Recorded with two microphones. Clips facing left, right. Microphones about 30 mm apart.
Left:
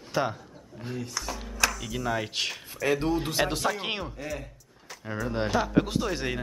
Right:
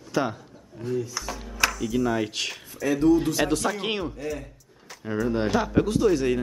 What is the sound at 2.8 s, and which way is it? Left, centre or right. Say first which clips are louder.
Speech: right 6 dB; left.